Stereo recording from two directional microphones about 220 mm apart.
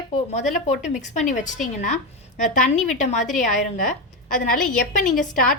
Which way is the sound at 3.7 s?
35° left (ahead or behind).